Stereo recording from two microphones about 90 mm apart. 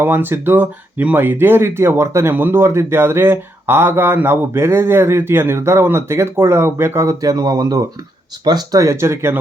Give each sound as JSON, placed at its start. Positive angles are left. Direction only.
{"t": 0.0, "sound": "speech", "side_deg": -25}